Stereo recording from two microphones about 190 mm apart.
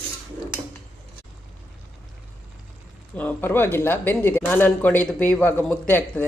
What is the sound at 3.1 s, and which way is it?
Speech, 10° left (ahead or behind).